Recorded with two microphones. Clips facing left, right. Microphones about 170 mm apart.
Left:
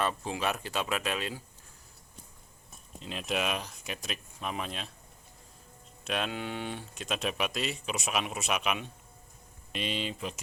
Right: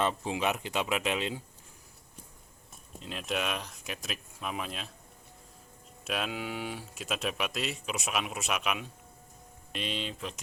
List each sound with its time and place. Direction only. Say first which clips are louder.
0.0 s speech: right 1 dB; 20° right (ahead or behind)
3.0 s speech: left 1 dB; centre (ahead or behind)
6.1 s speech: left 1 dB; 5° right (ahead or behind)